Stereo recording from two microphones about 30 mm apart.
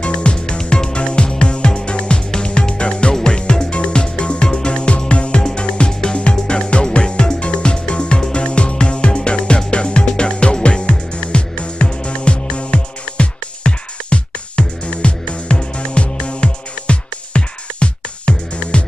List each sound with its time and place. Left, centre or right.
0.0 s music: left
0.6 s music: left
0.9 s music: left